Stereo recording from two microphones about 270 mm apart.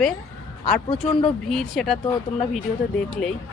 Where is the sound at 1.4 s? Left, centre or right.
Centre.